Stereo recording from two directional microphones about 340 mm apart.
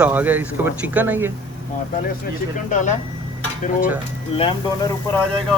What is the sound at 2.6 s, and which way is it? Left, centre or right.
Speech, left.